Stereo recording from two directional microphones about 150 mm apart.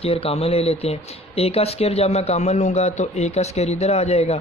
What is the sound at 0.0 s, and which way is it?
Speech, 40° left (ahead or behind).